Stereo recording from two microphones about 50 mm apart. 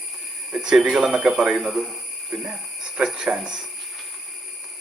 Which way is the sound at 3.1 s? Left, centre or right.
Centre.